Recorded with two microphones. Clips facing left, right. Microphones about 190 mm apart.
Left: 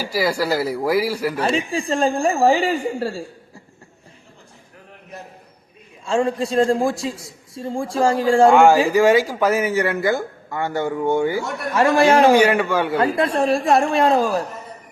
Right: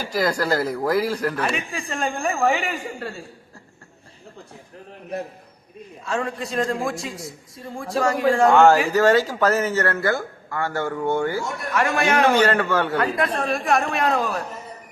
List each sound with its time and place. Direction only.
0.0 s speech: 10° left (ahead or behind)
1.4 s a woman's voice: 30° left (ahead or behind)
6.1 s speech: 30° left (ahead or behind)
8.4 s speech: 10° left (ahead or behind)
11.7 s speech: 30° left (ahead or behind)
12.3 s speech: 10° left (ahead or behind)
13.1 s speech: 30° left (ahead or behind)